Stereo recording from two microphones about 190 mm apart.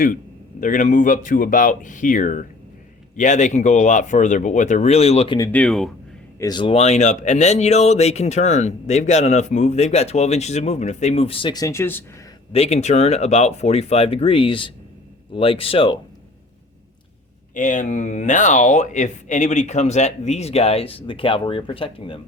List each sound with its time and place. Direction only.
0.6 s speech: 45° left (ahead or behind)
5.5 s speech: 5° left (ahead or behind)
6.4 s speech: 25° left (ahead or behind)
12.5 s speech: 35° left (ahead or behind)
17.5 s speech: 40° left (ahead or behind)